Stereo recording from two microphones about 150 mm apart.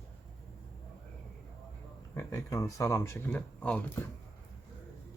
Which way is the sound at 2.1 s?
20° left (ahead or behind).